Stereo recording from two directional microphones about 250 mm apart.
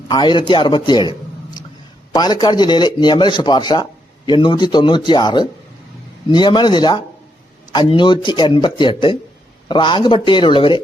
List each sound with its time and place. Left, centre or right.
0.1 s speech: centre
2.1 s speech: centre